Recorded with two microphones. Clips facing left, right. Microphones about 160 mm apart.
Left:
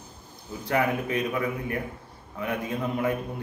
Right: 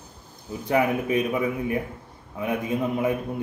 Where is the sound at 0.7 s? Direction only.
15° right (ahead or behind).